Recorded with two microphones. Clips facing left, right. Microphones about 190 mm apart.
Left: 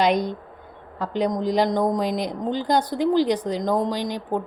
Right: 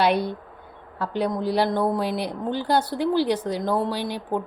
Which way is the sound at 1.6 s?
15° left (ahead or behind).